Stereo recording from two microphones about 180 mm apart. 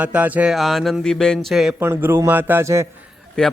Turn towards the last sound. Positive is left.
turn(degrees=5)  # may be behind; listen again after turning